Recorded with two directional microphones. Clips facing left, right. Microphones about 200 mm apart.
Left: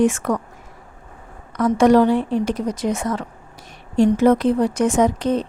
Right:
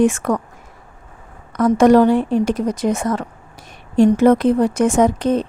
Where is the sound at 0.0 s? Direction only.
50° right (ahead or behind).